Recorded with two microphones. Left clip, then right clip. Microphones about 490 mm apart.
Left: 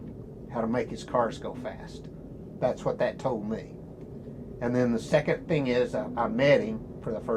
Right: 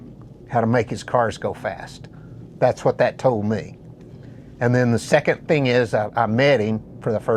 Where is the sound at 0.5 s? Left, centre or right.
Right.